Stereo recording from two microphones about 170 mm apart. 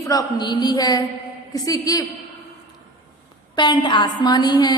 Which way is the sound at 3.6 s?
25° left (ahead or behind).